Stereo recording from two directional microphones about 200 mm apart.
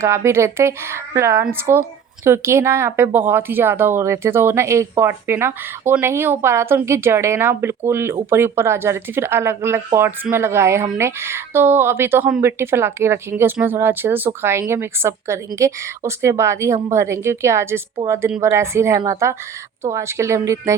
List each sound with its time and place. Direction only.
0.3 s speech: 15° right (ahead or behind)